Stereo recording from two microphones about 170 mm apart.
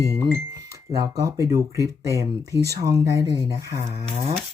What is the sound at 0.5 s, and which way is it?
Speech, 20° right (ahead or behind).